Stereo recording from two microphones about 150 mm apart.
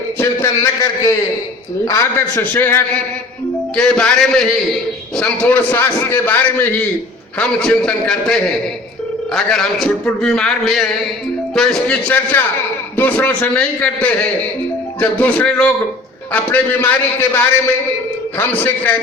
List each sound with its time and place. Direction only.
0.2 s a man's voice: 15° left (ahead or behind)